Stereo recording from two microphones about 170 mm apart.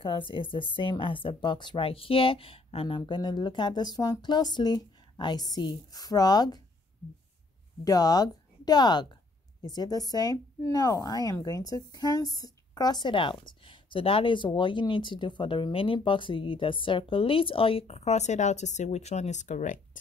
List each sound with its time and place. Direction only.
0.0 s a woman's voice: 30° left (ahead or behind)
7.8 s a woman's voice: 20° left (ahead or behind); by 20.0 s 50° left (ahead or behind)